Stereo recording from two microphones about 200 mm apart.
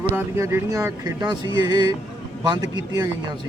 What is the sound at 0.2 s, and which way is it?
Speech, 10° right (ahead or behind).